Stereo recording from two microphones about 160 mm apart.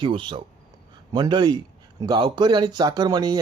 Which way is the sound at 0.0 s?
30° right (ahead or behind).